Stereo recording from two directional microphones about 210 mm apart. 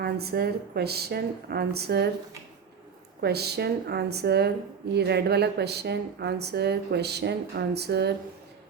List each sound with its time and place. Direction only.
0.0 s a woman's voice: 50° right (ahead or behind)
3.2 s a woman's voice: 50° right (ahead or behind)